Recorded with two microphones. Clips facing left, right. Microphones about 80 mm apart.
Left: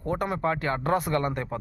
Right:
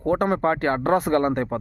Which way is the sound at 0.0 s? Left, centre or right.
Right.